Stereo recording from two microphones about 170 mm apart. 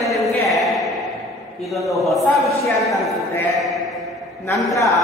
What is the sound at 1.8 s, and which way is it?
Speech, centre (ahead or behind).